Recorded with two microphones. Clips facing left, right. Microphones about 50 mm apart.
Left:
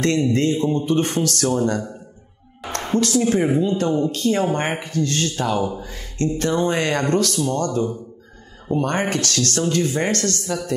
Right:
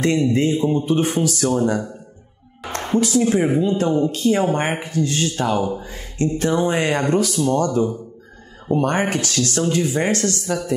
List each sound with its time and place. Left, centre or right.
0.0 s a man's voice: centre
9.1 s speech: centre